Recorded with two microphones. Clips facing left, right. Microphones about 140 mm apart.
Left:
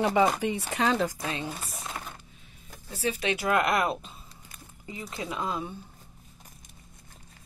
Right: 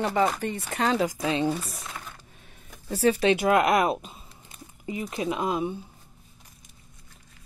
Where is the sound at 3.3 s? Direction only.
20° right (ahead or behind).